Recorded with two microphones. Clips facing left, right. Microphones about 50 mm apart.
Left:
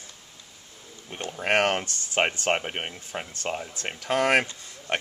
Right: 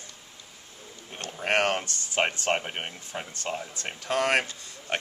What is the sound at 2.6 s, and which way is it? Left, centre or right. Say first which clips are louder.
Speech: left 2 dB; centre.